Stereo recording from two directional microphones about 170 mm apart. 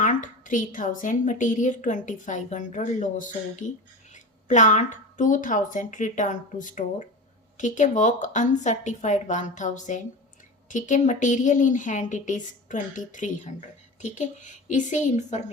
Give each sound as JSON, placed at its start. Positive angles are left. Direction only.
{"t": 0.0, "sound": "a woman's voice", "side_deg": 50}